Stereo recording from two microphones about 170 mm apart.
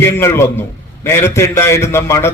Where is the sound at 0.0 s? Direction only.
15° left (ahead or behind).